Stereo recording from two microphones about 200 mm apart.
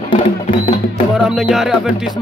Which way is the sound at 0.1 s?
25° left (ahead or behind).